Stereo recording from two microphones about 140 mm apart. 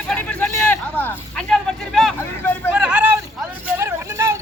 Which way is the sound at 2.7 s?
10° right (ahead or behind).